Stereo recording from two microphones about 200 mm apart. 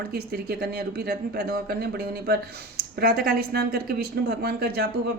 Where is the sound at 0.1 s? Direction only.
50° right (ahead or behind).